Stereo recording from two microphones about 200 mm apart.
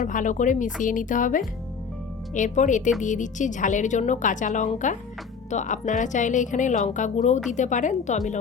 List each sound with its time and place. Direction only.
0.1 s a woman's voice: 40° left (ahead or behind)